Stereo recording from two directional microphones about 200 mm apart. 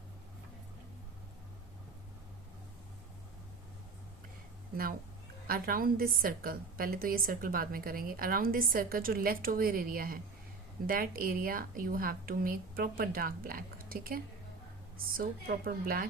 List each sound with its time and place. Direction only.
5.5 s a woman's voice: 45° right (ahead or behind)